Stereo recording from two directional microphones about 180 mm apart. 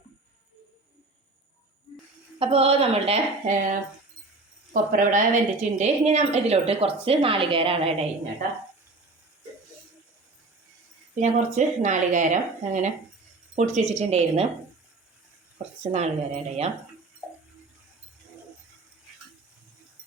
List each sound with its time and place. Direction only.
2.4 s a woman's voice: 35° right (ahead or behind)
11.1 s a woman's voice: 40° right (ahead or behind)
15.5 s a woman's voice: 35° right (ahead or behind)